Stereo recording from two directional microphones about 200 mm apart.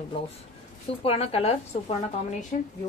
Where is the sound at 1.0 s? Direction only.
30° left (ahead or behind).